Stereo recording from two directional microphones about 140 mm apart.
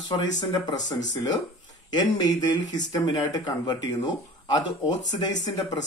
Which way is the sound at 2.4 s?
30° left (ahead or behind).